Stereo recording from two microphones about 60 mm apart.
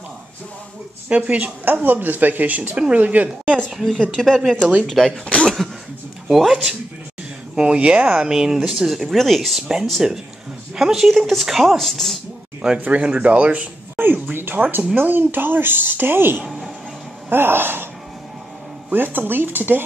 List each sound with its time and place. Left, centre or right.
1.0 s speech: right
3.9 s speech: centre
5.2 s speech: centre
6.2 s speech: centre
7.5 s speech: centre
8.2 s speech: centre
12.6 s speech: right
13.9 s a sound: right
15.0 s a woman's voice: right
16.4 s speech: centre
17.3 s a woman's voice: right
18.9 s a woman's voice: right